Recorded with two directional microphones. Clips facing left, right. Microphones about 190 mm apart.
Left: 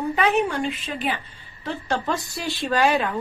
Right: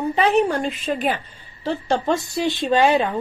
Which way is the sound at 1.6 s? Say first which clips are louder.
Right 5 dB; 30° right (ahead or behind).